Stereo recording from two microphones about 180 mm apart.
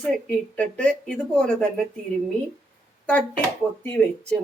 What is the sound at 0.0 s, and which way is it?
Speech, 5° left (ahead or behind).